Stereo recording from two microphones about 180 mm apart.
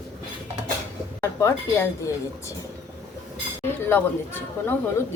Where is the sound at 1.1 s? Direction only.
15° left (ahead or behind).